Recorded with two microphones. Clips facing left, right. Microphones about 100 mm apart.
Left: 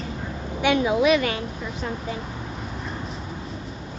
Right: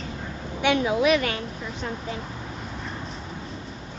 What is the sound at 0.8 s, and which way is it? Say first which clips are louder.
Speech: left 3 dB; 15° left (ahead or behind).